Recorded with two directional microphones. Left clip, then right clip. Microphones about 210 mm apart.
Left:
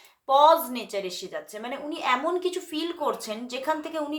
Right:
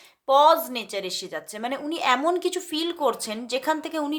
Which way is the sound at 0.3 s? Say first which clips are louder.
Right 1 dB; 35° right (ahead or behind).